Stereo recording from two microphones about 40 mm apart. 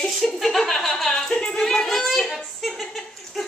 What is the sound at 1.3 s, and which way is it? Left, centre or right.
Music, left.